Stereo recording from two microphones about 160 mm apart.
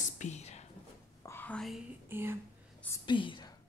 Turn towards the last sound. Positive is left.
turn(degrees=30)  # may be behind; listen again after turning